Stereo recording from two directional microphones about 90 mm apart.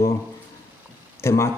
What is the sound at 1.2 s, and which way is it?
Speech, 30° left (ahead or behind).